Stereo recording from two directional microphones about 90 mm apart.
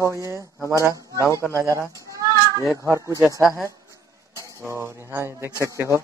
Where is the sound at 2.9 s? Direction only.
35° right (ahead or behind).